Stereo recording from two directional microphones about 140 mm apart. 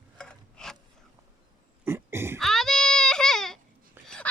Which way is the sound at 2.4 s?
5° left (ahead or behind).